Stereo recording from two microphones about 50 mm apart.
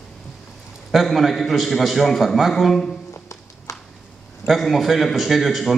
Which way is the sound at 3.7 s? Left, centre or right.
Left.